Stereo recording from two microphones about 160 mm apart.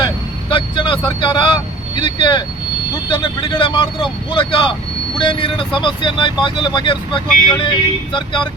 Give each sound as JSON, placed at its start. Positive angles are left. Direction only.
{"t": 0.5, "sound": "speech", "side_deg": 30}